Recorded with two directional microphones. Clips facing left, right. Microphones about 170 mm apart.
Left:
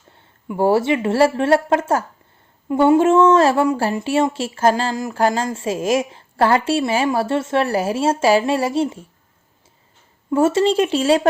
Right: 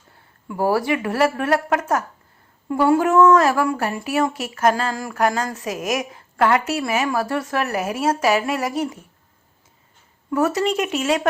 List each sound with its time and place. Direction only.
0.4 s a woman's voice: 25° left (ahead or behind)
10.2 s a woman's voice: 25° left (ahead or behind)